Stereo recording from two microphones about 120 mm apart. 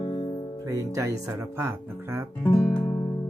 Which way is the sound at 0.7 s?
25° right (ahead or behind).